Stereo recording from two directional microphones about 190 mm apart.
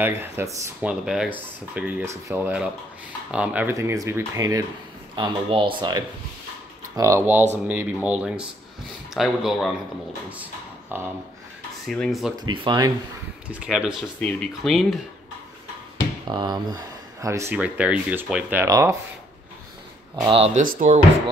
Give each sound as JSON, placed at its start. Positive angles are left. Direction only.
{"t": 0.0, "sound": "speech", "side_deg": -10}
{"t": 12.4, "sound": "speech", "side_deg": -20}
{"t": 13.5, "sound": "speech", "side_deg": -5}
{"t": 16.3, "sound": "speech", "side_deg": -25}
{"t": 20.2, "sound": "speech", "side_deg": -30}
{"t": 20.6, "sound": "speech", "side_deg": -45}